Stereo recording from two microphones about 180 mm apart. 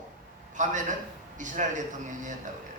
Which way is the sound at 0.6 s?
45° right (ahead or behind).